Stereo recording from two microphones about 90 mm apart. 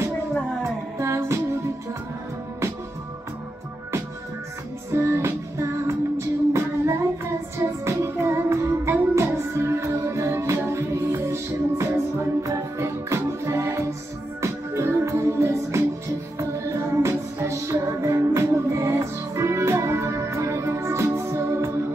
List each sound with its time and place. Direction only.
0.9 s music: 30° right (ahead or behind)
4.9 s music: 30° right (ahead or behind)
17.0 s music: 30° right (ahead or behind)